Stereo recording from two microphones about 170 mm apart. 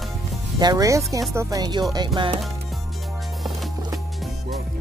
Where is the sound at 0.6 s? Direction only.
20° right (ahead or behind).